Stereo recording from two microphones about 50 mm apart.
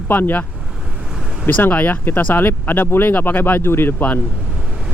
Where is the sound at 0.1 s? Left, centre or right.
Left.